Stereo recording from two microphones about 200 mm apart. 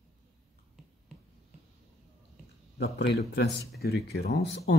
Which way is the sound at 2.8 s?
55° left (ahead or behind).